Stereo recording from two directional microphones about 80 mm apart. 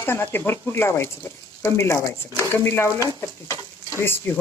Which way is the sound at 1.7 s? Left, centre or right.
Left.